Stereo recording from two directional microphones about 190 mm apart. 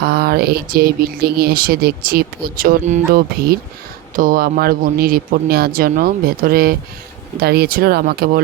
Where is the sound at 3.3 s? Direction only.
55° right (ahead or behind).